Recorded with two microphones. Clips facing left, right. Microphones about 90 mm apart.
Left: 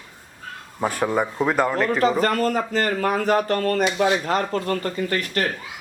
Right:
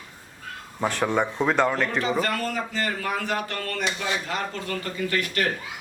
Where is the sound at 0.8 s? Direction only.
10° left (ahead or behind).